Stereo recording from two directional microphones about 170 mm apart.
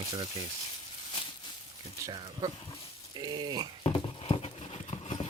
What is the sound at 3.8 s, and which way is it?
Clip-clop, 30° left (ahead or behind).